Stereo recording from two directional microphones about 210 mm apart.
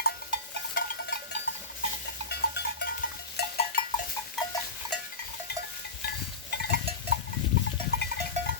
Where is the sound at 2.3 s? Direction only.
50° left (ahead or behind).